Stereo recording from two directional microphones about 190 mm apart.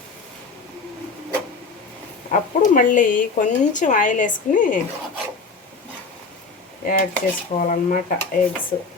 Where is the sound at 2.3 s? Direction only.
45° left (ahead or behind).